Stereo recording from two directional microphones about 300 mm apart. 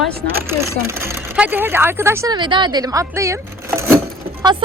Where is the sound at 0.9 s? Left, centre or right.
Centre.